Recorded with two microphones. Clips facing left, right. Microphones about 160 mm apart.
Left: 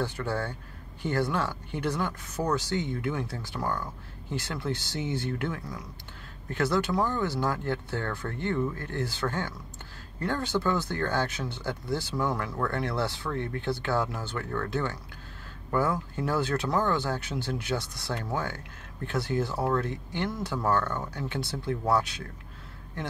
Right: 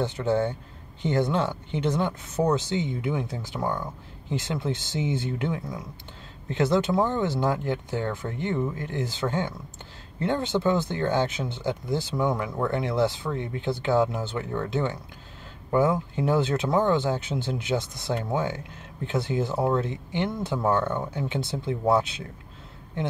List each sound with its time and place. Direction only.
0.0 s speech: 20° right (ahead or behind)